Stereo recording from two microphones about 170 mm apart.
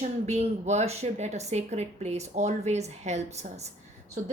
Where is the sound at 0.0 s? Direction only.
40° right (ahead or behind).